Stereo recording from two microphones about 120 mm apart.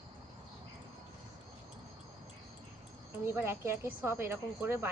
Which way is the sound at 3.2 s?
20° right (ahead or behind).